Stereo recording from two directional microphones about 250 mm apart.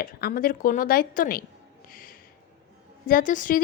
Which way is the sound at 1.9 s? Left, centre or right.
Left.